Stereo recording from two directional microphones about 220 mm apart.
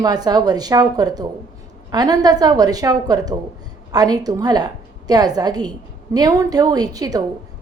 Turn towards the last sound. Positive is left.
turn(degrees=-15)  # may be behind; listen again after turning